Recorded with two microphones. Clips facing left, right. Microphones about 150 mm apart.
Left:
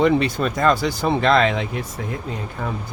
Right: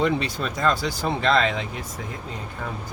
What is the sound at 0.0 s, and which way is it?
Speech, 55° left (ahead or behind).